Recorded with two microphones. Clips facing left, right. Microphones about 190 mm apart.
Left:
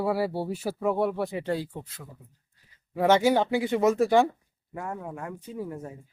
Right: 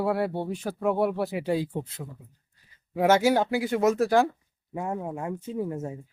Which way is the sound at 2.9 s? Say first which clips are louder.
Even; 10° right (ahead or behind).